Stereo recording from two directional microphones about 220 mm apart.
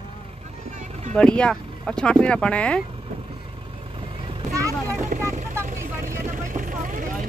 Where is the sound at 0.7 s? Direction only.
30° right (ahead or behind).